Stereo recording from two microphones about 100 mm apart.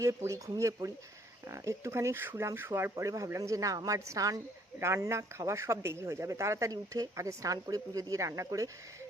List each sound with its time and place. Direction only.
0.0 s speech: 30° right (ahead or behind)